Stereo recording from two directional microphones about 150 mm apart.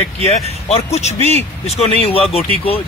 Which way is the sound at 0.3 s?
45° left (ahead or behind).